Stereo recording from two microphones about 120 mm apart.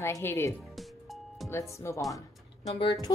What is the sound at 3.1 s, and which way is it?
Speech, 30° left (ahead or behind).